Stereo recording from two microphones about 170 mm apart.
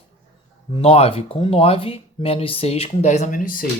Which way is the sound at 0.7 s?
35° left (ahead or behind).